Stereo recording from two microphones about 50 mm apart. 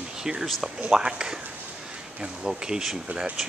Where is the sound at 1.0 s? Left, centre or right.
Centre.